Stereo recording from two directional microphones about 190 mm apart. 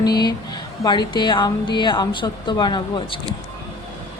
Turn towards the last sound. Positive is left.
turn(degrees=25)  # may be behind; listen again after turning